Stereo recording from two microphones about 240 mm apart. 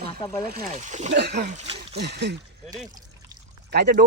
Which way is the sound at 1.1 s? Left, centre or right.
Right.